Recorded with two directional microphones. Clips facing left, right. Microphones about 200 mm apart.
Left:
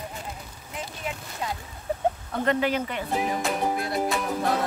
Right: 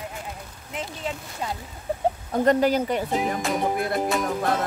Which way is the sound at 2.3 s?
40° right (ahead or behind).